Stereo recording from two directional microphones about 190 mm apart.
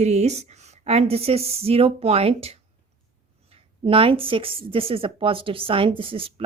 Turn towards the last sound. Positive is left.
turn(degrees=-30)  # may be behind; listen again after turning